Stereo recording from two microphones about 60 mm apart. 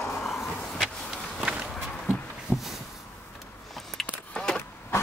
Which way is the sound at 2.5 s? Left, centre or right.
Left.